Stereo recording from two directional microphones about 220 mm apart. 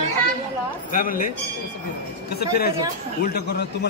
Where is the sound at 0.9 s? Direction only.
40° left (ahead or behind).